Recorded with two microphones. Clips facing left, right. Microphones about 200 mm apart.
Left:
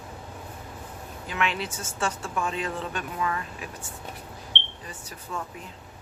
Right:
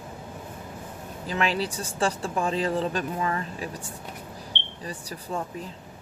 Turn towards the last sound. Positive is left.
turn(degrees=-35)  # may be behind; listen again after turning